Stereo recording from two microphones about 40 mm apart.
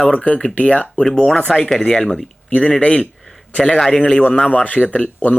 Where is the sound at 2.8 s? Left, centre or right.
Left.